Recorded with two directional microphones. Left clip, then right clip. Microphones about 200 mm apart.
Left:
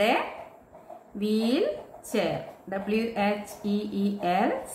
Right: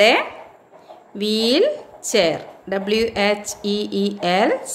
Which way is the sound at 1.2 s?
45° right (ahead or behind).